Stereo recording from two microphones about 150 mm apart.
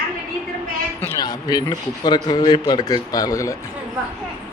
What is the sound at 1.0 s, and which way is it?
A man's voice, 20° left (ahead or behind).